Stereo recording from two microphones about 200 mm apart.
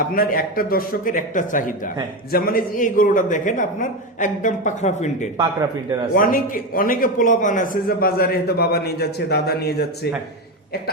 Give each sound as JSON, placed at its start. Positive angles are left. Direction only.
{"t": 0.1, "sound": "a man's voice", "side_deg": 45}